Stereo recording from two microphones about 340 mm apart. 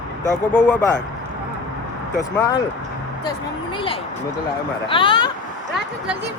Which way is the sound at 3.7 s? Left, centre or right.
Centre.